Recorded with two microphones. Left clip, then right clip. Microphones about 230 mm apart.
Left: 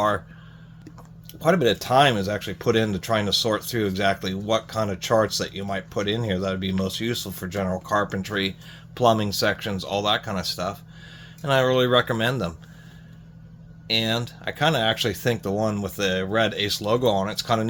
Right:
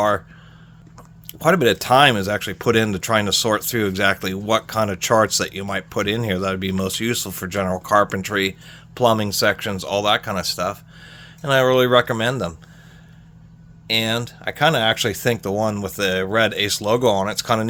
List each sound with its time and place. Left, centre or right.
1.3 s speech: right
13.8 s speech: right